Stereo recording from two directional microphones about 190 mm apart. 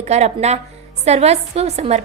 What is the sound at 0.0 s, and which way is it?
A woman's voice, 35° right (ahead or behind).